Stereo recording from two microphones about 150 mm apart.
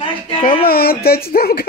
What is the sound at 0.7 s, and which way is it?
Speech, 90° left.